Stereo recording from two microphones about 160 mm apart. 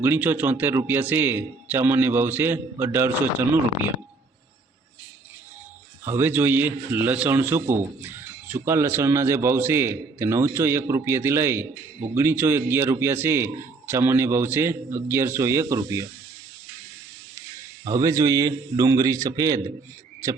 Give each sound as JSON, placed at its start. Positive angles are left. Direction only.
{"t": 0.0, "sound": "a man's voice", "side_deg": -15}
{"t": 6.1, "sound": "a man's voice", "side_deg": -15}
{"t": 17.8, "sound": "a man's voice", "side_deg": -25}